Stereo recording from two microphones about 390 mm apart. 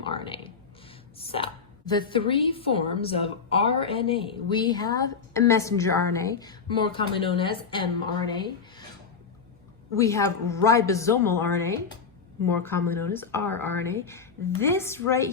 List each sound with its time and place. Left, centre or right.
0.0 s speech: centre
10.0 s speech: centre